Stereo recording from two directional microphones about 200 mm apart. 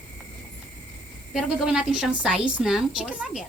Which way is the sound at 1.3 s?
5° right (ahead or behind).